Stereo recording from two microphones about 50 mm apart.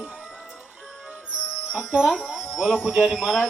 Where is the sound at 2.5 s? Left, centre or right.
Centre.